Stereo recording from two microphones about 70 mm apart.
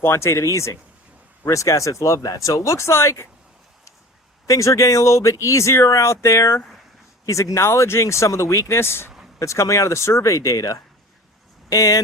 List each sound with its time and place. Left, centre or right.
0.0 s speech: left
4.4 s speech: left
9.4 s speech: left